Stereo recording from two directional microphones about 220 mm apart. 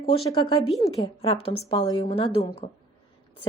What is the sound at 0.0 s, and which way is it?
A woman's voice, 20° left (ahead or behind).